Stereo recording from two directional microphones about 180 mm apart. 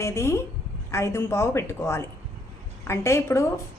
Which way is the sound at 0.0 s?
15° left (ahead or behind).